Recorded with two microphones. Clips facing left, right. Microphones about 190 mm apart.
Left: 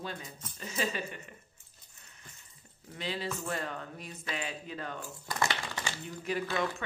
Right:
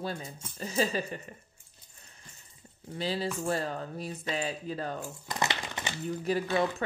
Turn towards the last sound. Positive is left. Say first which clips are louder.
# right 4 dB
turn(degrees=-35)  # may be behind; listen again after turning